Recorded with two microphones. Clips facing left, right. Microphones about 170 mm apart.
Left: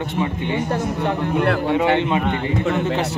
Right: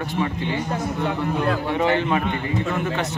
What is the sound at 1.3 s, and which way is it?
Speech, 65° left (ahead or behind).